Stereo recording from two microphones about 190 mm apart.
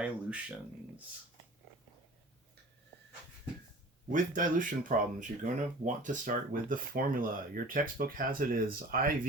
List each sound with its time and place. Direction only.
0.0 s speech: 5° right (ahead or behind)
4.1 s speech: 45° right (ahead or behind)